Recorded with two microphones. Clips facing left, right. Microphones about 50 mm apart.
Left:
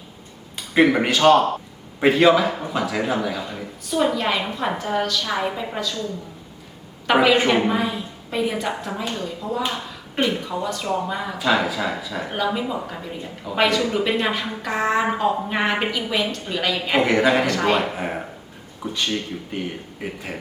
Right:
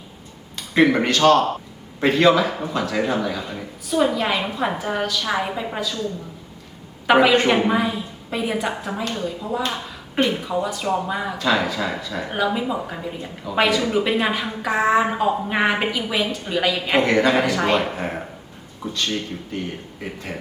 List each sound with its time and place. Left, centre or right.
0.5 s a man's voice: centre
7.1 s a woman's voice: centre
11.3 s speech: centre
18.8 s speech: centre